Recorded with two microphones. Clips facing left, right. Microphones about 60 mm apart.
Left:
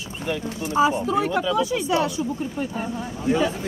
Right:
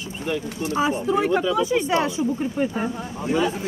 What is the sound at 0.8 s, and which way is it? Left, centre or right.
Speech, centre.